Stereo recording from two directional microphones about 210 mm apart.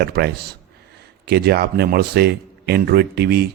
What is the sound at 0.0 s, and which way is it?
Speech, 50° right (ahead or behind).